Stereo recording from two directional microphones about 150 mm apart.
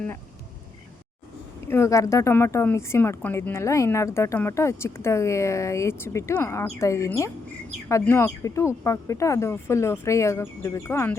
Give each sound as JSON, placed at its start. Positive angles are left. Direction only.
{"t": 1.6, "sound": "speech", "side_deg": 15}